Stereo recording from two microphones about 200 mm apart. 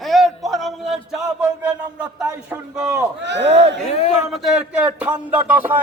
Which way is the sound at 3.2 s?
60° right (ahead or behind).